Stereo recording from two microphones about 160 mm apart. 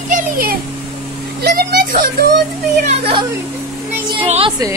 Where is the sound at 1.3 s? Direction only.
70° right (ahead or behind).